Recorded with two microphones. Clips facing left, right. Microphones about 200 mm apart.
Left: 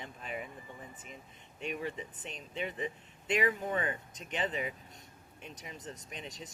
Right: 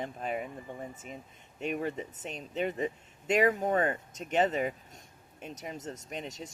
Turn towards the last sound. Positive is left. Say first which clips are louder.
# right 6 dB
turn(degrees=-45)  # may be behind; listen again after turning